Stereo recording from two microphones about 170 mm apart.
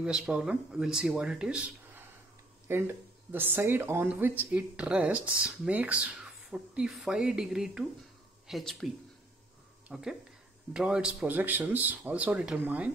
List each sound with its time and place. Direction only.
0.0 s speech: 5° right (ahead or behind)